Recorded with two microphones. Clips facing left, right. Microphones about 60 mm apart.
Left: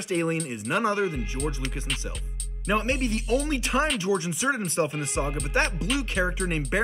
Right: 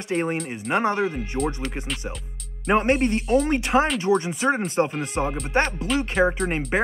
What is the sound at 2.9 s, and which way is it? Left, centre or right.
Speech, right.